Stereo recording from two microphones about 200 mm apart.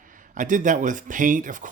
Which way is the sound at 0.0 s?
40° right (ahead or behind).